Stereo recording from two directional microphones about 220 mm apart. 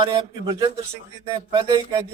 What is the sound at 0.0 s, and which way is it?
A man's voice, 20° right (ahead or behind).